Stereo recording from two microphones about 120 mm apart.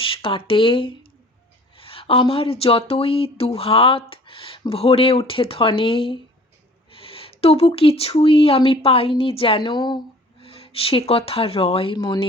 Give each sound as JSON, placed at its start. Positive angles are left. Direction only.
{"t": 0.0, "sound": "speech", "side_deg": 50}
{"t": 6.9, "sound": "a sound", "side_deg": 50}
{"t": 7.8, "sound": "speech", "side_deg": 55}
{"t": 10.4, "sound": "speech", "side_deg": 55}